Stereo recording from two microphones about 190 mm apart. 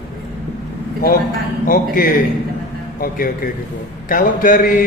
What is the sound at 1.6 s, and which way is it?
A man's voice, 50° left (ahead or behind).